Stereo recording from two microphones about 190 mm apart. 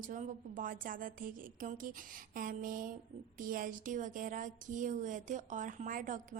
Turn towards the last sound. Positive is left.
turn(degrees=-45)  # may be behind; listen again after turning